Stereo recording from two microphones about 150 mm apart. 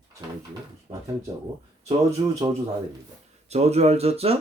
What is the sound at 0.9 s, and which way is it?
Speech, 35° right (ahead or behind).